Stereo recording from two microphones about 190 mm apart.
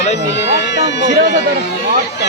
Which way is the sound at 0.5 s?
65° left (ahead or behind).